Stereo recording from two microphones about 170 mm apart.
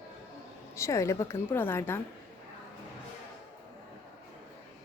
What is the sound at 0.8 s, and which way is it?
A woman's voice, 15° left (ahead or behind).